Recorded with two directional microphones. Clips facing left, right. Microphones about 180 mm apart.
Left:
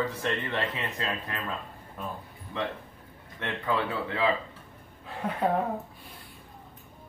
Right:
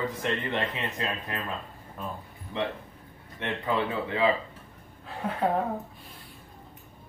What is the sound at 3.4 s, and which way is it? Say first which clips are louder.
Speech: right 1 dB; 20° right (ahead or behind).